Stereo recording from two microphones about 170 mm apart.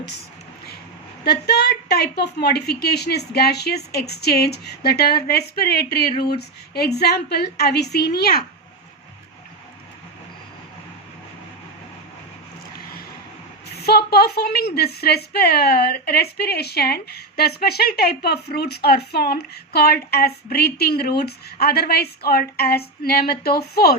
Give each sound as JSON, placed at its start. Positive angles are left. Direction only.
{"t": 1.2, "sound": "a woman's voice", "side_deg": 75}
{"t": 13.8, "sound": "a woman's voice", "side_deg": 70}